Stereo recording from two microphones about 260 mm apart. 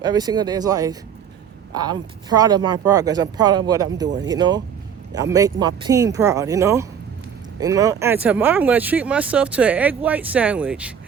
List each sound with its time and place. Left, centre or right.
0.0 s speech: centre